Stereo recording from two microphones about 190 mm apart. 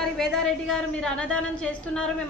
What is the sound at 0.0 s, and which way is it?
A woman's voice, centre (ahead or behind).